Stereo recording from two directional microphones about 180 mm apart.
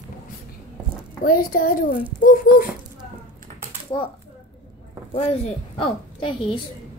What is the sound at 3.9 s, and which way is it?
Speech, 30° left (ahead or behind).